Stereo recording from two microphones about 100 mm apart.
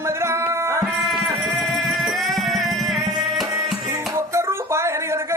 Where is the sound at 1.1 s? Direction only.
Centre (ahead or behind).